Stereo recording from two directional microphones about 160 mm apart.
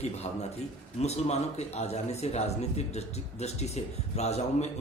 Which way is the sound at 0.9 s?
45° left (ahead or behind).